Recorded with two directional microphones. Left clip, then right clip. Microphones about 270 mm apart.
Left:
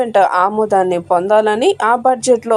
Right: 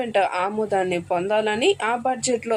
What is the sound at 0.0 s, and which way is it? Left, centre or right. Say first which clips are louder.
Speech: left 9 dB; centre.